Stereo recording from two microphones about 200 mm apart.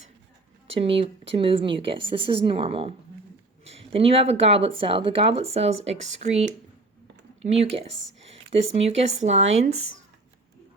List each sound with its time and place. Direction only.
0.8 s speech: 25° right (ahead or behind)